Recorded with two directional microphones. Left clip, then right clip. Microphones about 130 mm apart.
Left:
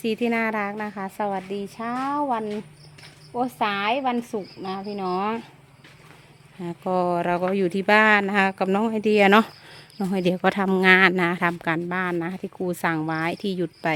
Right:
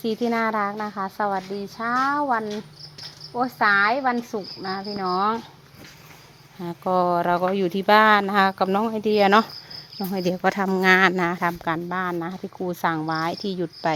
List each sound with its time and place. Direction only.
0.0 s speech: 25° left (ahead or behind)
3.3 s speech: 15° left (ahead or behind)
4.9 s speech: 25° left (ahead or behind)
6.6 s speech: 15° left (ahead or behind)
7.5 s speech: 35° left (ahead or behind); by 10.3 s 50° left (ahead or behind)
10.3 s speech: 35° left (ahead or behind)